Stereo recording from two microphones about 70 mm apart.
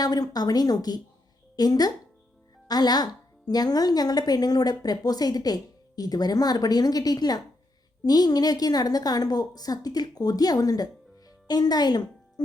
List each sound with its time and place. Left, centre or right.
0.0 s speech: left